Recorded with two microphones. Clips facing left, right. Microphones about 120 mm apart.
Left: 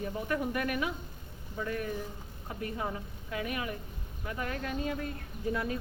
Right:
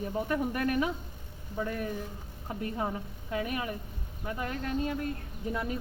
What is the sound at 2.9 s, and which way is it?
Speech, 30° right (ahead or behind).